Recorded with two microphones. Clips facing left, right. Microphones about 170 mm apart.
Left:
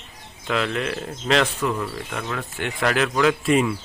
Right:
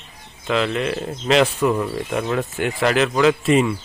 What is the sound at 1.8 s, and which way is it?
Speech, 25° right (ahead or behind).